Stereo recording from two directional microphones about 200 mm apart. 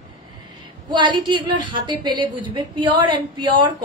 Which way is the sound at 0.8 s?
20° right (ahead or behind).